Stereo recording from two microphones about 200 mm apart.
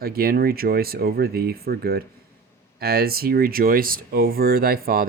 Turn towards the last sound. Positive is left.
turn(degrees=-45)  # may be behind; listen again after turning